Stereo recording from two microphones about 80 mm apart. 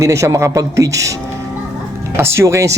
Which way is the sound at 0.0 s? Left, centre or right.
Right.